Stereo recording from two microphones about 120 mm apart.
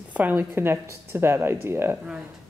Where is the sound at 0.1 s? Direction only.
15° right (ahead or behind).